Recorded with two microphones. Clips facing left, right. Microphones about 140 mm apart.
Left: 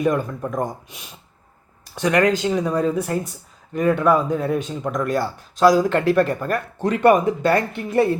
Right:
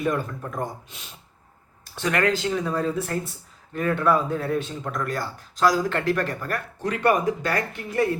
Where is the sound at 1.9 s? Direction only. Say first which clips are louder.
Left 5 dB; 15° left (ahead or behind).